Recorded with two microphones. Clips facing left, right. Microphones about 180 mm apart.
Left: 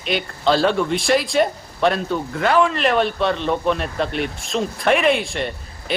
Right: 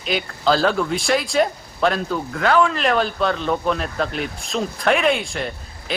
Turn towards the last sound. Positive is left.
turn(degrees=0)  # may be behind; listen again after turning